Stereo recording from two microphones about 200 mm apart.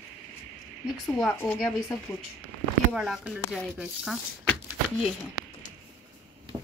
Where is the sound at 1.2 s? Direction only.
5° left (ahead or behind).